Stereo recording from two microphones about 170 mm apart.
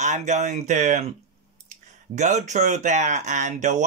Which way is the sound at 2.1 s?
45° right (ahead or behind).